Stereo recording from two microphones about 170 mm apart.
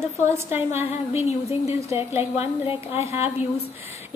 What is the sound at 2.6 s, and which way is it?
Speech, 35° left (ahead or behind).